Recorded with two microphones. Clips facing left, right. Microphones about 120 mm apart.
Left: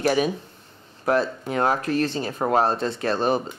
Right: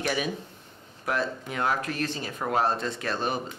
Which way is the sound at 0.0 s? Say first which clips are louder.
Left 7 dB; 40° left (ahead or behind).